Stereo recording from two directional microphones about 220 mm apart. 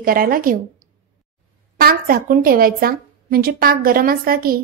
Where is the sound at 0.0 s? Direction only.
40° right (ahead or behind).